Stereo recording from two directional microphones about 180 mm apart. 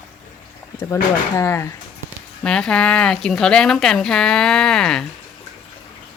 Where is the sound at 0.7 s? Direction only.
15° left (ahead or behind).